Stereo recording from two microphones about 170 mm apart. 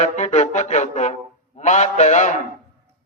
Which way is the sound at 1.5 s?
45° left (ahead or behind).